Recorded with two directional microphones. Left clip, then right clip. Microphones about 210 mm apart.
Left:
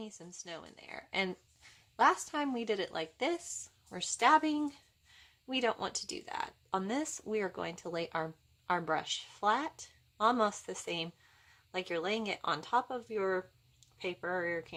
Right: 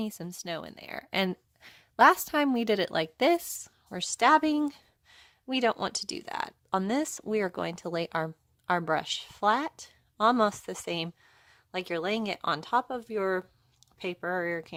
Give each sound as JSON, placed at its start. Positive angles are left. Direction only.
{"t": 0.0, "sound": "speech", "side_deg": -45}